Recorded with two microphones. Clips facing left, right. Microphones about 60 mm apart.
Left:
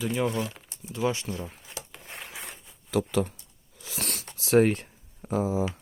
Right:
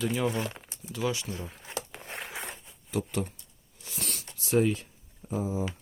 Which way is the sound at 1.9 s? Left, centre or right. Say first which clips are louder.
Right 3 dB; centre.